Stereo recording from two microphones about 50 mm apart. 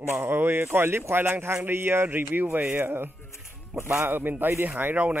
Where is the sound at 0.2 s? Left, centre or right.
Right.